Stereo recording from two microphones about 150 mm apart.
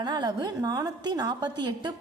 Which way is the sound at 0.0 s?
30° right (ahead or behind).